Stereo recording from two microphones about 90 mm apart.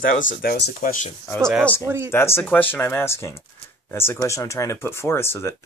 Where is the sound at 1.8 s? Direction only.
30° right (ahead or behind).